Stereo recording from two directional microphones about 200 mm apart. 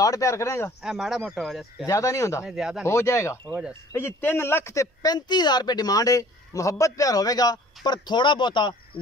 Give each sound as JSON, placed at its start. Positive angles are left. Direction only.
{"t": 0.0, "sound": "speech", "side_deg": 15}
{"t": 0.8, "sound": "speech", "side_deg": 0}
{"t": 1.9, "sound": "speech", "side_deg": 15}
{"t": 2.4, "sound": "speech", "side_deg": -5}
{"t": 2.9, "sound": "speech", "side_deg": 15}
{"t": 3.4, "sound": "speech", "side_deg": -10}
{"t": 3.9, "sound": "a man's voice", "side_deg": 10}